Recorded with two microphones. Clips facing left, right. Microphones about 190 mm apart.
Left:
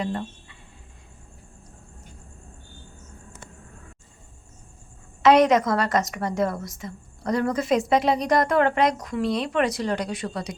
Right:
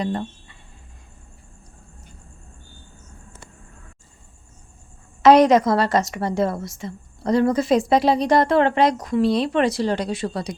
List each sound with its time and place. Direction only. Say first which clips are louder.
0.0 s speech: right 3 dB; 40° right (ahead or behind)
5.2 s a woman's voice: right 4 dB; 35° right (ahead or behind)